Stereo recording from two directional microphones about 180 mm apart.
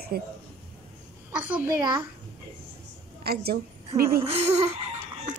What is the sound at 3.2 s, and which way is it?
Speech, 60° right (ahead or behind).